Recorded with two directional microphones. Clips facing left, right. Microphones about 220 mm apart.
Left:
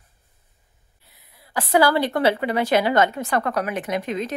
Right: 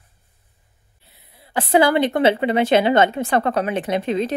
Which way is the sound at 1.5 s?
25° right (ahead or behind).